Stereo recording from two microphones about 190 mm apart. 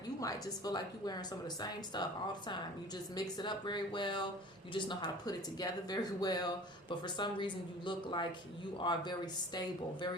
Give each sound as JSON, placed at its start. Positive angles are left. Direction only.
{"t": 0.2, "sound": "speech", "side_deg": 20}
{"t": 3.2, "sound": "speech", "side_deg": 20}